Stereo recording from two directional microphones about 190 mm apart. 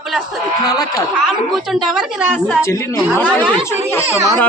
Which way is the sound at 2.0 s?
5° right (ahead or behind).